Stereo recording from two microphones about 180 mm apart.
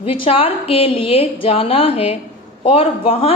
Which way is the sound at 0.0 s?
30° left (ahead or behind).